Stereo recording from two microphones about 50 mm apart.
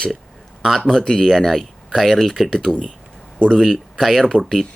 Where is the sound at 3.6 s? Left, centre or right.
Centre.